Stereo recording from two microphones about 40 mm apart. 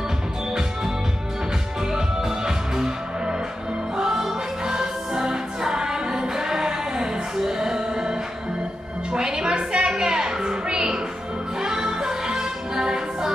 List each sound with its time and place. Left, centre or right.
1.9 s music: centre